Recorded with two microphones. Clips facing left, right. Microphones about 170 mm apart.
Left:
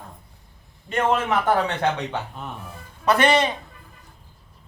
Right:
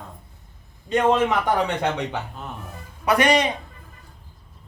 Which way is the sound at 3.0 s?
15° right (ahead or behind).